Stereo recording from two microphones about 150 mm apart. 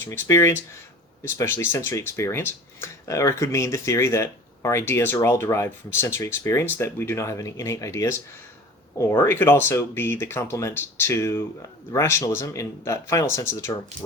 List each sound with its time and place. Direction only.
0.0 s speech: 15° left (ahead or behind)